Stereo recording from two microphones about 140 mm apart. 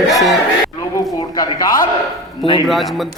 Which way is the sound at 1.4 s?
25° left (ahead or behind).